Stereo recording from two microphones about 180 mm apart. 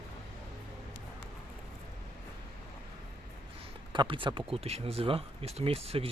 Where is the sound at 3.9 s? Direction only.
25° right (ahead or behind).